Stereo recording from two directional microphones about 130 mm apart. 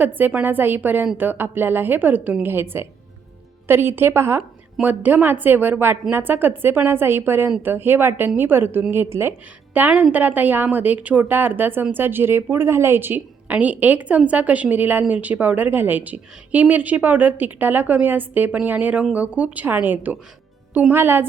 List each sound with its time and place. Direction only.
0.0 s a woman's voice: 15° right (ahead or behind)